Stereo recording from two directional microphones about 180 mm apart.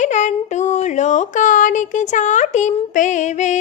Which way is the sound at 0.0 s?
40° left (ahead or behind).